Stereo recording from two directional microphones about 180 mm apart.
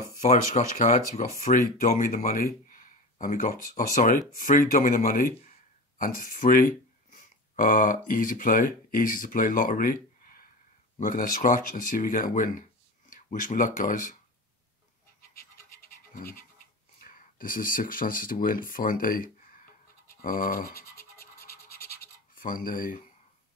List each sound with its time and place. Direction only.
0.2 s speech: 40° left (ahead or behind)
16.2 s speech: 55° left (ahead or behind)
20.9 s scratch: 15° left (ahead or behind)
22.3 s speech: 50° left (ahead or behind)